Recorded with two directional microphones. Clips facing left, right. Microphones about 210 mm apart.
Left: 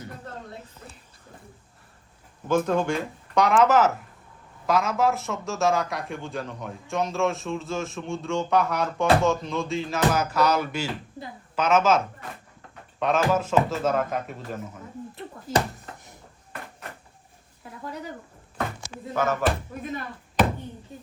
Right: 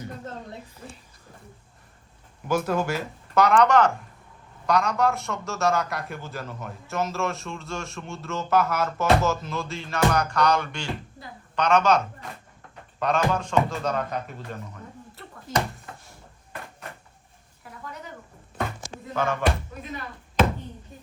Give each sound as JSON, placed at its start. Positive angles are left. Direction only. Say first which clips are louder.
{"t": 2.5, "sound": "a man's voice", "louder": "left 2 dB", "side_deg": -10}
{"t": 17.6, "sound": "a sound", "louder": "left 2 dB", "side_deg": 25}
{"t": 19.1, "sound": "a man's voice", "louder": "left 1 dB", "side_deg": 5}